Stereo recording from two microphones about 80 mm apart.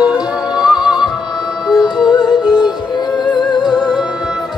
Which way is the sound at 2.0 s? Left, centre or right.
Left.